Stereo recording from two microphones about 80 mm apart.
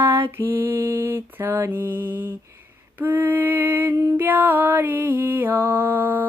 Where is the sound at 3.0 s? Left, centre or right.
Right.